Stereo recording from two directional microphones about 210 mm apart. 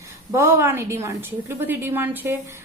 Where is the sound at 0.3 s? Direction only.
10° right (ahead or behind).